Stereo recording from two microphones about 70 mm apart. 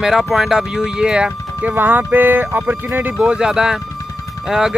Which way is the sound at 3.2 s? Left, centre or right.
Centre.